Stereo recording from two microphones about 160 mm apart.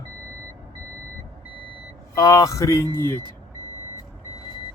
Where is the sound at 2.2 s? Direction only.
25° left (ahead or behind).